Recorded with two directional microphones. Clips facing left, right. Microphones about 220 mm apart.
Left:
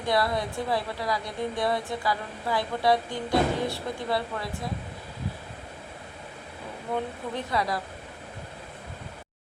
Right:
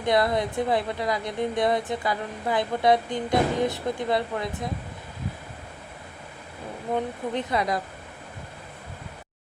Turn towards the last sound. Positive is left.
turn(degrees=-20)  # may be behind; listen again after turning